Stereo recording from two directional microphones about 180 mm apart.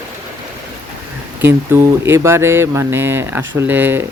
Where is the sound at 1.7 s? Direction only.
15° right (ahead or behind).